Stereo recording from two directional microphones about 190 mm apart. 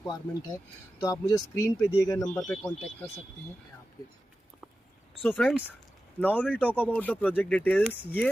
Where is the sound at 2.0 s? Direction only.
20° left (ahead or behind).